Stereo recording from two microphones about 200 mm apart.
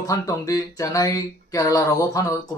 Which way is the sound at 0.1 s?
15° left (ahead or behind).